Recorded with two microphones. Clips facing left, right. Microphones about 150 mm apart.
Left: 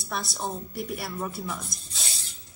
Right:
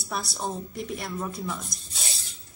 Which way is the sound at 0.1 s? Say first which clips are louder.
Right 1 dB; centre (ahead or behind).